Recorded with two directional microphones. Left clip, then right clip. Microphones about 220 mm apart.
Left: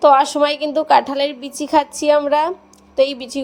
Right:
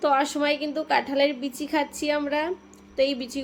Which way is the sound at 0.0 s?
30° left (ahead or behind).